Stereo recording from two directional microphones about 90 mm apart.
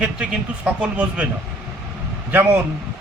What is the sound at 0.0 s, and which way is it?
A man's voice, 10° right (ahead or behind).